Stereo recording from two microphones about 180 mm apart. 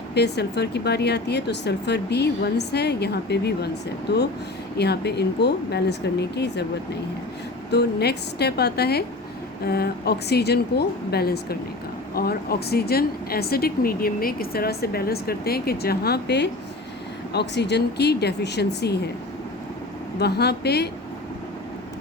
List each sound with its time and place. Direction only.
0.1 s a woman's voice: 65° left (ahead or behind)
4.8 s a woman's voice: 65° left (ahead or behind)
7.7 s a woman's voice: 65° left (ahead or behind)
20.1 s speech: 65° left (ahead or behind)